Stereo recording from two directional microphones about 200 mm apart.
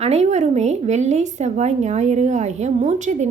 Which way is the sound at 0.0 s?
35° right (ahead or behind).